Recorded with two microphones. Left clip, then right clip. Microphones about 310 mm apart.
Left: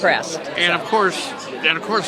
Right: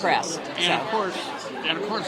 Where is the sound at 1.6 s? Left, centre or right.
Left.